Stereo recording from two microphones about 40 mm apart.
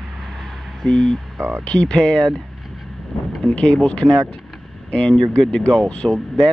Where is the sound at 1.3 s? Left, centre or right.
Right.